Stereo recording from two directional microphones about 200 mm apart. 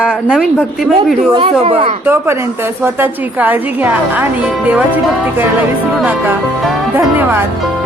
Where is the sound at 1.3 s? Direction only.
30° right (ahead or behind).